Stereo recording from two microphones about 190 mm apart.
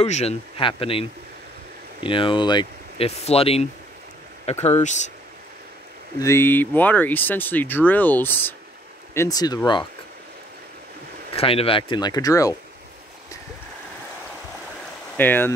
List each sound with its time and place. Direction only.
0.0 s speech: 35° left (ahead or behind)
6.1 s speech: 15° left (ahead or behind)
11.3 s speech: 30° left (ahead or behind)
15.1 s speech: 10° left (ahead or behind)